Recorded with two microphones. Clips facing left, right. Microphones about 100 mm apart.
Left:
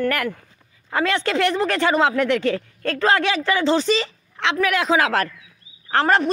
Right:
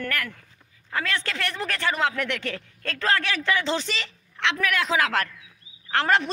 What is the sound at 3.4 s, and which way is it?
A woman's voice, 10° left (ahead or behind).